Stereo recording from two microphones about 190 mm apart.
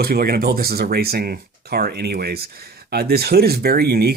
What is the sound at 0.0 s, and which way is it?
Speech, 55° right (ahead or behind).